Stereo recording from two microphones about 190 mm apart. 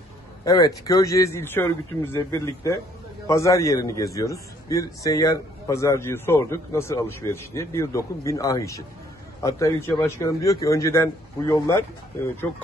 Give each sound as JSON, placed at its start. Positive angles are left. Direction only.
{"t": 0.5, "sound": "a man's voice", "side_deg": 20}